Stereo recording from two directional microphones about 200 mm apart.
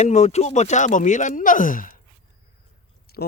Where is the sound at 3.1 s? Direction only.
50° left (ahead or behind).